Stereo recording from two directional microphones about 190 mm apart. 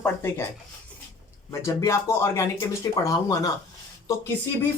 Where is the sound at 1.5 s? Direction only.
15° left (ahead or behind).